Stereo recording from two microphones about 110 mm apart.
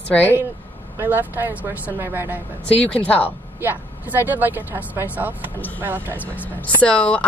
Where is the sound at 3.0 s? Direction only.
15° left (ahead or behind).